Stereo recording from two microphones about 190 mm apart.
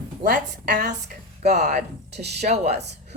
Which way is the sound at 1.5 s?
40° right (ahead or behind).